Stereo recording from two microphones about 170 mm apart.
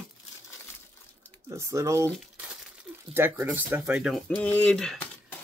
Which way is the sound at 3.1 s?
15° right (ahead or behind).